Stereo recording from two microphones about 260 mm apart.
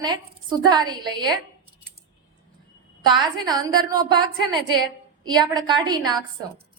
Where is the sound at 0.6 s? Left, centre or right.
Centre.